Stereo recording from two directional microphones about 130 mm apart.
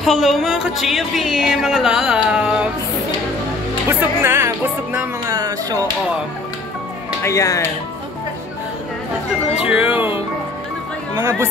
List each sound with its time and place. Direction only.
0.0 s speech: centre (ahead or behind)
4.2 s music: 20° right (ahead or behind)
5.3 s speech: 30° right (ahead or behind)
7.2 s speech: 25° left (ahead or behind)
9.6 s music: 10° right (ahead or behind)
11.1 s speech: 20° right (ahead or behind)